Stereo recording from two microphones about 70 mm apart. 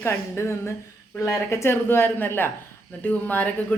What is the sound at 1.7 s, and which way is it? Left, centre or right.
A man's voice, left.